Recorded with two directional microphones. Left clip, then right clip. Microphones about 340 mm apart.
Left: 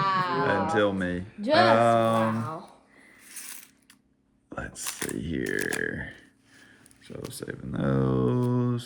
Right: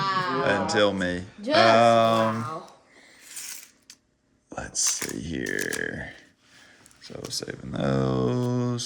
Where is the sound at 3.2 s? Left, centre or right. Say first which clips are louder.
Right 5 dB; centre.